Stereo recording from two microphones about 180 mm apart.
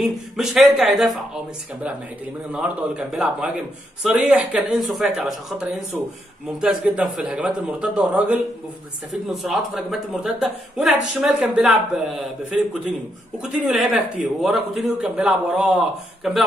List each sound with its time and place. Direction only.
0.0 s a man's voice: centre (ahead or behind)
13.4 s a man's voice: 5° right (ahead or behind)